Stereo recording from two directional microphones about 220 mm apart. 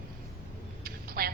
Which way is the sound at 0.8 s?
45° right (ahead or behind).